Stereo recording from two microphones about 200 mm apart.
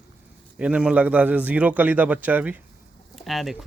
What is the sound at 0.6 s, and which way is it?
A man's voice, 5° right (ahead or behind).